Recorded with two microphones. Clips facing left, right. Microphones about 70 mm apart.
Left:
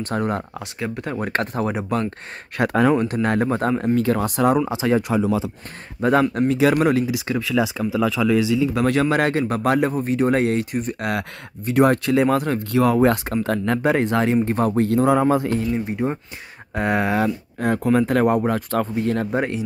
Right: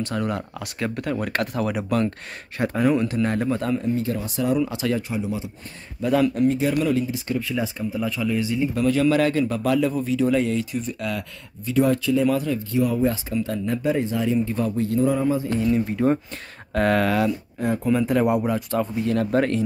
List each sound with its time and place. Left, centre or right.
0.0 s speech: left
0.7 s speech: centre
2.5 s speech: left
2.9 s speech: left
3.9 s speech: left
4.6 s speech: left
5.9 s speech: left
6.3 s speech: left
9.0 s speech: left
16.0 s speech: left
17.6 s speech: left
18.2 s speech: left
19.3 s speech: centre